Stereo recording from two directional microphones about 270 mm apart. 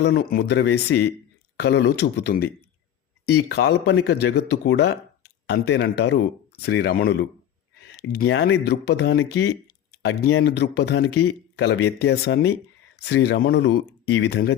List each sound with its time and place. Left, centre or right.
0.0 s speech: left
10.4 s speech: left